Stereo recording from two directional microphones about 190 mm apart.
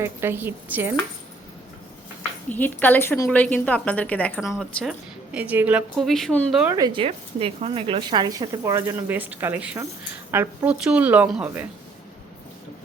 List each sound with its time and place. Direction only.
0.0 s a woman's voice: 10° right (ahead or behind)
2.5 s a woman's voice: 10° left (ahead or behind)
6.7 s a woman's voice: 20° right (ahead or behind)